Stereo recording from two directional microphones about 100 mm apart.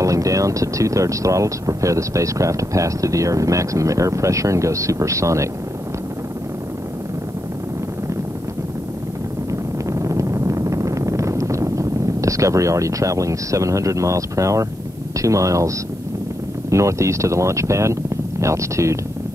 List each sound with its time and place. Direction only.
0.0 s speech: 35° right (ahead or behind)
9.5 s a sound: 30° right (ahead or behind)
15.1 s speech: 30° right (ahead or behind)
16.7 s speech: 30° right (ahead or behind)